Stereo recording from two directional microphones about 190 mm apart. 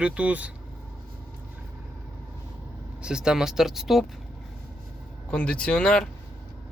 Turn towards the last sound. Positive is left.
turn(degrees=5)  # may be behind; listen again after turning